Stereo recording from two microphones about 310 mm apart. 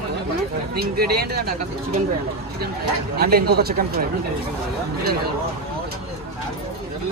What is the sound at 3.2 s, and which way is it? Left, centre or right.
Speech, right.